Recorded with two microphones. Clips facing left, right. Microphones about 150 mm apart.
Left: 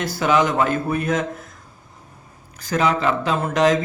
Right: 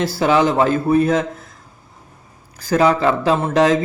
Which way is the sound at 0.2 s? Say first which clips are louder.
Right 3 dB; 30° right (ahead or behind).